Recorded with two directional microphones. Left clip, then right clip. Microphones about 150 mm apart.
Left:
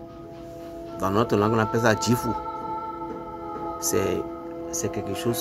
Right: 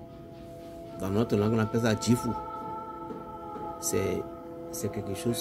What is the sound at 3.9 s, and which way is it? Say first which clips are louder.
Speech: left 5 dB; 20° right (ahead or behind).